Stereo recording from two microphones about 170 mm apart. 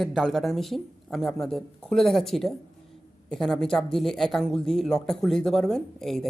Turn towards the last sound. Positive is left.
turn(degrees=0)  # may be behind; listen again after turning